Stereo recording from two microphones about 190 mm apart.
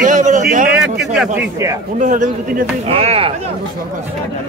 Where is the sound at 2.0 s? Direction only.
40° right (ahead or behind).